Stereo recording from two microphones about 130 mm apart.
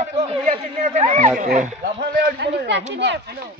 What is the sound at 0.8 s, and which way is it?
Speech, 65° right (ahead or behind).